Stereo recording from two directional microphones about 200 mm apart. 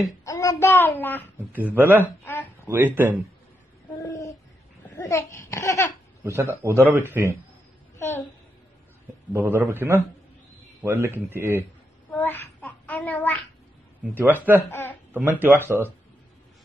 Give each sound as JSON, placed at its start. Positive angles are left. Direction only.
{"t": 0.0, "sound": "a child's voice", "side_deg": 15}
{"t": 1.5, "sound": "speech", "side_deg": -10}
{"t": 2.0, "sound": "speech", "side_deg": 10}
{"t": 2.7, "sound": "speech", "side_deg": -10}
{"t": 4.0, "sound": "a sound", "side_deg": 15}
{"t": 4.8, "sound": "a child's voice", "side_deg": 15}
{"t": 6.2, "sound": "speech", "side_deg": -10}
{"t": 9.3, "sound": "speech", "side_deg": -10}
{"t": 12.1, "sound": "child singing", "side_deg": 10}
{"t": 14.1, "sound": "speech", "side_deg": -10}
{"t": 14.7, "sound": "a child's voice", "side_deg": 10}
{"t": 15.1, "sound": "speech", "side_deg": -10}